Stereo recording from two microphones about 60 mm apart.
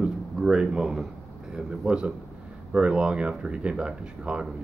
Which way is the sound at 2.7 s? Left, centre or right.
Centre.